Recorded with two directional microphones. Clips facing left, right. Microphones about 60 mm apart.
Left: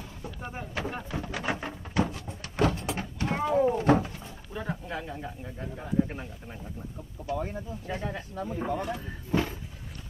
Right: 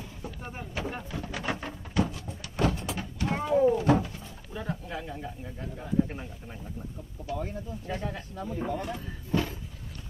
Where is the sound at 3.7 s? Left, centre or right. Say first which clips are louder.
Left 1 dB; left.